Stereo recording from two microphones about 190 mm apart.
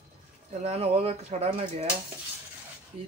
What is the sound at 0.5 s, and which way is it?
A man's voice, 35° right (ahead or behind).